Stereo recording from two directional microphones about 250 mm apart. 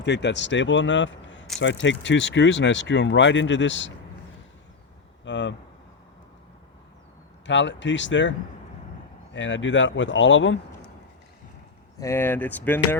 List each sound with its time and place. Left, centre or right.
0.0 s speech: left
5.2 s speech: left
7.4 s speech: left
11.9 s speech: centre